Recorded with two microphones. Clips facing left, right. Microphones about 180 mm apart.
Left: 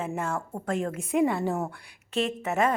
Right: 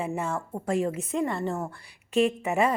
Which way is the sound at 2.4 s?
10° right (ahead or behind).